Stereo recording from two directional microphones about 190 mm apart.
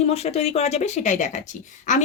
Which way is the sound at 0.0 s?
35° left (ahead or behind).